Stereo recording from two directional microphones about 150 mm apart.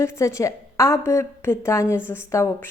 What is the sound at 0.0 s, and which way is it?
A woman's voice, 20° left (ahead or behind).